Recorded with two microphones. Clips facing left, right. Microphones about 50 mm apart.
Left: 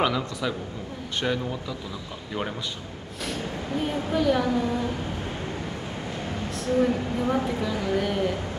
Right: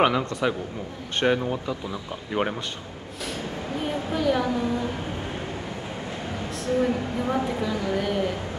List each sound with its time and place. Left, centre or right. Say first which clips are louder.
0.0 s a man's voice: right 4 dB; right
3.8 s a woman's voice: left 1 dB; centre
6.5 s a woman's voice: left 1 dB; centre